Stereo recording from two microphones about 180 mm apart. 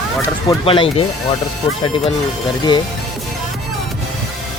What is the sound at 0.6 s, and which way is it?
Speech, 30° left (ahead or behind).